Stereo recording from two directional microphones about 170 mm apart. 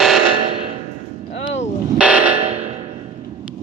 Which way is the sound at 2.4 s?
35° right (ahead or behind).